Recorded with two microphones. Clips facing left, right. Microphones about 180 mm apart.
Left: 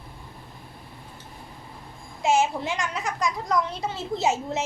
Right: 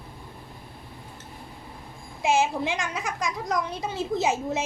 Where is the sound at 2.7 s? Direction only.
20° right (ahead or behind).